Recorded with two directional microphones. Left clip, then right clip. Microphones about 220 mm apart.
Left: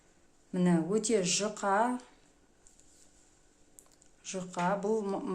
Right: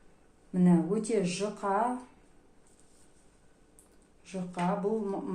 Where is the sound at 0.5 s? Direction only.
40° left (ahead or behind).